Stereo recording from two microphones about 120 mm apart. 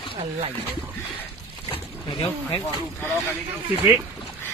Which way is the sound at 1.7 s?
45° left (ahead or behind).